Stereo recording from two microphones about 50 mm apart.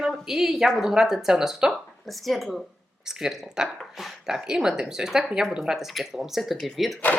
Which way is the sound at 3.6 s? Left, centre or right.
Centre.